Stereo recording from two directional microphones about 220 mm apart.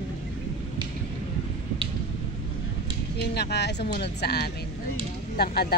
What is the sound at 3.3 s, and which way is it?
Speech, 50° left (ahead or behind).